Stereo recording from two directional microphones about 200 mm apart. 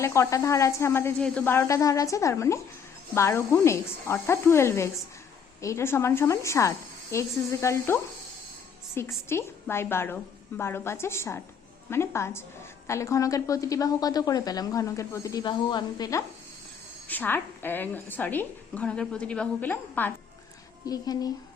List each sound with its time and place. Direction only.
0.0 s a woman's voice: 15° left (ahead or behind)